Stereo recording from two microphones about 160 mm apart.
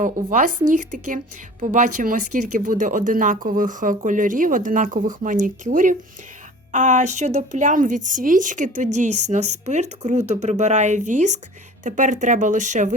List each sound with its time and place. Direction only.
0.0 s a woman's voice: 55° right (ahead or behind)